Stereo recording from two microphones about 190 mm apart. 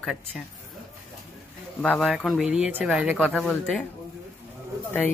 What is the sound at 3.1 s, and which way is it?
Speech, 5° left (ahead or behind).